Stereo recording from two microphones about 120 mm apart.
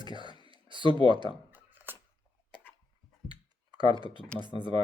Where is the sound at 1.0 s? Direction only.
40° right (ahead or behind).